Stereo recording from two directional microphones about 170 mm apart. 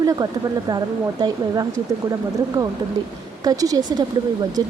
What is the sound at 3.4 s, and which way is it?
Speech, 20° right (ahead or behind).